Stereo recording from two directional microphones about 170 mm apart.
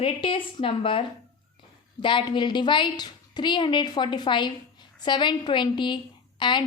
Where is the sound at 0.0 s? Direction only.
30° left (ahead or behind).